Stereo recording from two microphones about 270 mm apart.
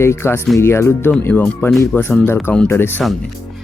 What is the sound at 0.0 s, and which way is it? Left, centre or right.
Speech, centre.